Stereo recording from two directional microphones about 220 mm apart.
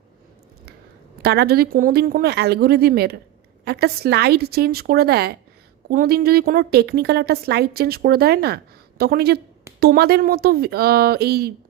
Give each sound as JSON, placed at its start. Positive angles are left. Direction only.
{"t": 1.2, "sound": "a woman's voice", "side_deg": -45}